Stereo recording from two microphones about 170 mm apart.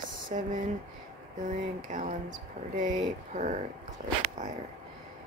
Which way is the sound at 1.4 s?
50° right (ahead or behind).